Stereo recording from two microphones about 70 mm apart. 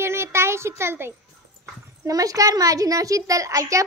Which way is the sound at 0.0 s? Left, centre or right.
Right.